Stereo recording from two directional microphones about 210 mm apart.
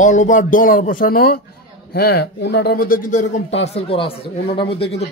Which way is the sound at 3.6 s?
30° left (ahead or behind).